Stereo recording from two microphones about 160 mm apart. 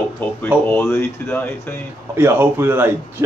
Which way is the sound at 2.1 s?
15° right (ahead or behind).